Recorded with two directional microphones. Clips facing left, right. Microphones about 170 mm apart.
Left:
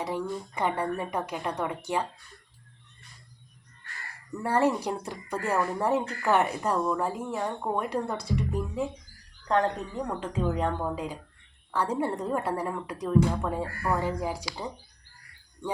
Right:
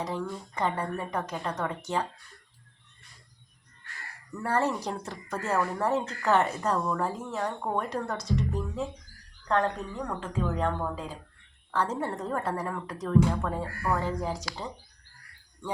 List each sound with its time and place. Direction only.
0.0 s speech: 15° left (ahead or behind)
4.4 s speech: 15° left (ahead or behind)